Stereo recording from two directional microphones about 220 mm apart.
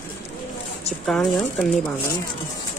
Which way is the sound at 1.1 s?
5° left (ahead or behind).